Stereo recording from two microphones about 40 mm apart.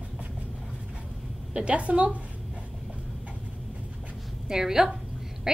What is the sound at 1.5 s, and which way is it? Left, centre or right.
Speech, right.